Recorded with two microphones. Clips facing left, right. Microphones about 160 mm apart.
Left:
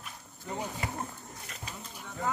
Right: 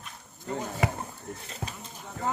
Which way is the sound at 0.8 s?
90° right.